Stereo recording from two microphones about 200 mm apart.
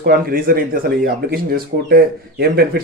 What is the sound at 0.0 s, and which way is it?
Speech, 45° right (ahead or behind).